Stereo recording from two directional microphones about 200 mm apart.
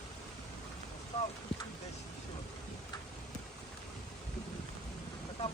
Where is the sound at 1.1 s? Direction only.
30° left (ahead or behind).